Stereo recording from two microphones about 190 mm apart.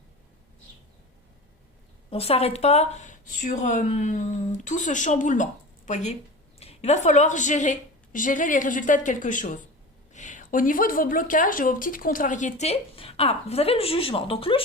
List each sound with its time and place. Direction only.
2.0 s speech: 30° left (ahead or behind)